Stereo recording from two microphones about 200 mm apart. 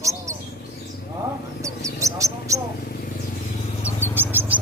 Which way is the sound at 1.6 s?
15° right (ahead or behind).